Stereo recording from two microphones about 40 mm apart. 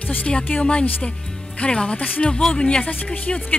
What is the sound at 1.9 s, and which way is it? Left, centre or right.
Speech, left.